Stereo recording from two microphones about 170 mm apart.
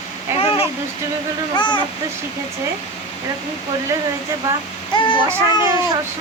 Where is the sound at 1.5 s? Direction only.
25° left (ahead or behind).